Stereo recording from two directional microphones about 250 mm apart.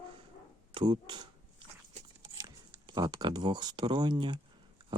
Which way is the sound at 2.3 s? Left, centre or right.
Centre.